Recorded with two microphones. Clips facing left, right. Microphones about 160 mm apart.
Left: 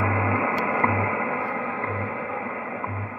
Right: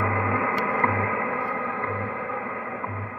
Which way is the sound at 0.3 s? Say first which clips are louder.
Left 1 dB; 15° left (ahead or behind).